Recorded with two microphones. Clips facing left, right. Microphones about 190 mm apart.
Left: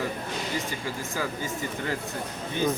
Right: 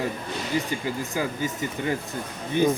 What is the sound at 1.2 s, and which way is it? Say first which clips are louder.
Speech: right 2 dB; 15° right (ahead or behind).